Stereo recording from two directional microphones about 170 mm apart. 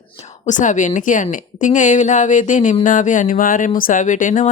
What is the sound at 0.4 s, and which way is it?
A woman's voice, 45° left (ahead or behind).